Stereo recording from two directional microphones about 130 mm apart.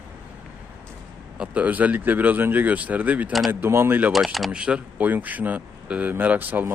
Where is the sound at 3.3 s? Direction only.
Centre (ahead or behind).